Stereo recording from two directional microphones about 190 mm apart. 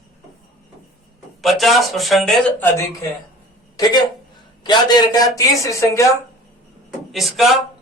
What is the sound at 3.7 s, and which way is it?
Speech, 20° left (ahead or behind).